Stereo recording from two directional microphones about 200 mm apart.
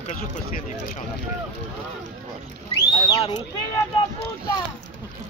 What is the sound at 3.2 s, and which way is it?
Speech, 25° left (ahead or behind).